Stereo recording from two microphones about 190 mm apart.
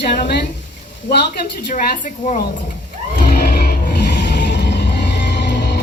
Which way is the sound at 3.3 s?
55° left (ahead or behind).